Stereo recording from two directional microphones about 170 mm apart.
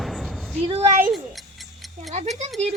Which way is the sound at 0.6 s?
35° right (ahead or behind).